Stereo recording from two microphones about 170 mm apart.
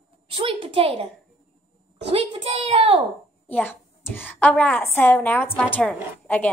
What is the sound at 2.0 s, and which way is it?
Speech, 35° right (ahead or behind).